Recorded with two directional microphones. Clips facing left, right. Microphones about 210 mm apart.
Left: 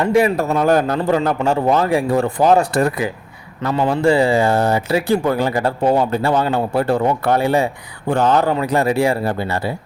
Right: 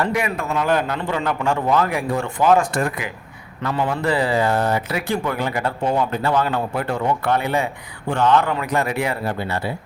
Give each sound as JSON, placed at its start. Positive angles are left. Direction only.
{"t": 0.0, "sound": "speech", "side_deg": 30}